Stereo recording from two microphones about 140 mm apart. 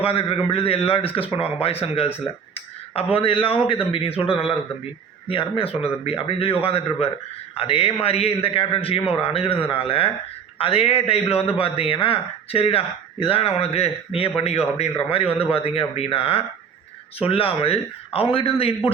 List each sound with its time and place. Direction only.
0.0 s a man's voice: 45° left (ahead or behind)